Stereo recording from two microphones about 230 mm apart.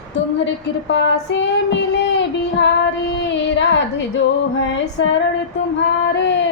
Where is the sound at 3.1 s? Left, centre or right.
Left.